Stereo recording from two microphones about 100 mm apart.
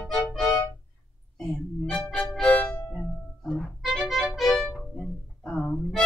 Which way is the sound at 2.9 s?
5° left (ahead or behind).